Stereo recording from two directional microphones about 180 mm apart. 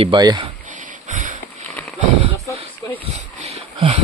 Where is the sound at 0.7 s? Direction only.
45° right (ahead or behind).